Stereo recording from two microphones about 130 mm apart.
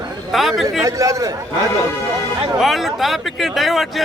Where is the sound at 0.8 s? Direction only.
25° right (ahead or behind).